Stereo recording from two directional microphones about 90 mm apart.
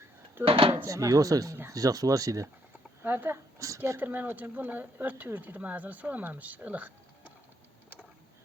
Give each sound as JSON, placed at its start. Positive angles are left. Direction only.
{"t": 0.4, "sound": "speech", "side_deg": -90}
{"t": 0.9, "sound": "speech", "side_deg": -40}
{"t": 3.0, "sound": "speech", "side_deg": -25}